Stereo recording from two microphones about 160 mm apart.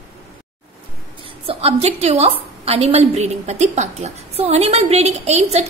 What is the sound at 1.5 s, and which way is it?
A woman's voice, 40° right (ahead or behind).